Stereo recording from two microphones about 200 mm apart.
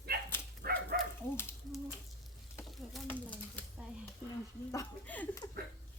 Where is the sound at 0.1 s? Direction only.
50° right (ahead or behind).